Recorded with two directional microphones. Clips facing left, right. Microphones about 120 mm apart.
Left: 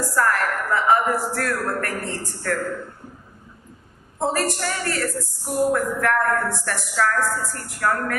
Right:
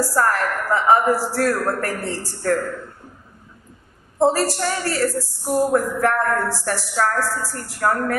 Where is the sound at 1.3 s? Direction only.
30° right (ahead or behind).